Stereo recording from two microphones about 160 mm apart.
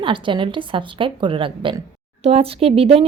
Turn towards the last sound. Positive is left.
turn(degrees=-40)  # may be behind; listen again after turning